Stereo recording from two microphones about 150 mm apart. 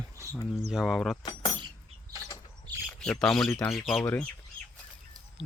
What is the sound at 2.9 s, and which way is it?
Speech, 5° left (ahead or behind).